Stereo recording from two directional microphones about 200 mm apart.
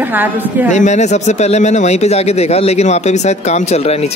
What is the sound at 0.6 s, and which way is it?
Speech, 35° left (ahead or behind).